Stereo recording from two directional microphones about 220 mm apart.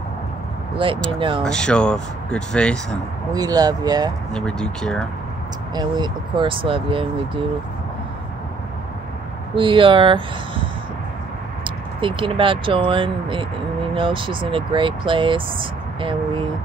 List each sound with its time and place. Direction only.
0.8 s speech: 25° right (ahead or behind)
1.4 s speech: 5° left (ahead or behind)
3.3 s speech: 15° right (ahead or behind)
4.3 s speech: 5° left (ahead or behind)
5.8 s speech: 20° right (ahead or behind)
9.6 s speech: 25° right (ahead or behind)